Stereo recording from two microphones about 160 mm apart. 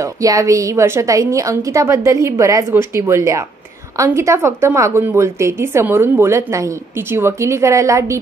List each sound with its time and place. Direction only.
0.0 s a woman's voice: 20° right (ahead or behind)